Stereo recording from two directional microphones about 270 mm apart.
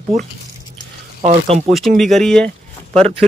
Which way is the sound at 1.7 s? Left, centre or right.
Centre.